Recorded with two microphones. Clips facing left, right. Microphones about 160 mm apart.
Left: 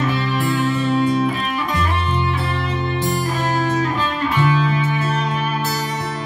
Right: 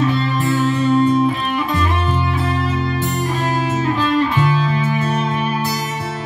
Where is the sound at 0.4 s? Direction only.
40° right (ahead or behind).